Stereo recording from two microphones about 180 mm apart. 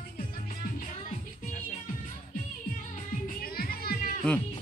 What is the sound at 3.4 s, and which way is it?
Music, 55° left (ahead or behind).